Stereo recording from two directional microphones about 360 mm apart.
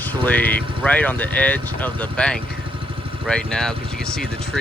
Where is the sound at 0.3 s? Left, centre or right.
Centre.